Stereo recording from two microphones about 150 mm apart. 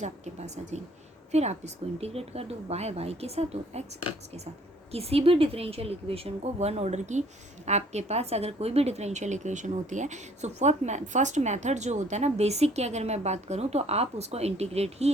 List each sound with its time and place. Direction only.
0.0 s a woman's voice: 50° right (ahead or behind)
4.9 s a woman's voice: 40° right (ahead or behind)